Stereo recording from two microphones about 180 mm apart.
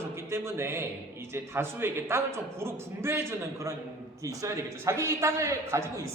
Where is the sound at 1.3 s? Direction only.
15° right (ahead or behind).